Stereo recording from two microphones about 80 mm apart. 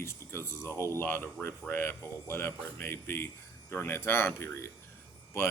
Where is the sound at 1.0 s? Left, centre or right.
Left.